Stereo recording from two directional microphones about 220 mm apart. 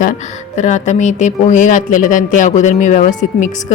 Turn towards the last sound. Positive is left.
turn(degrees=35)  # may be behind; listen again after turning